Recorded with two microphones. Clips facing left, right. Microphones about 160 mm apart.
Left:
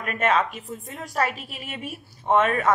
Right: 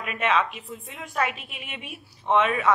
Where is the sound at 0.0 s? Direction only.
45° left (ahead or behind).